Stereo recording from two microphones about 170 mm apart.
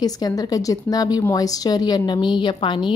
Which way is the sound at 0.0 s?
20° left (ahead or behind).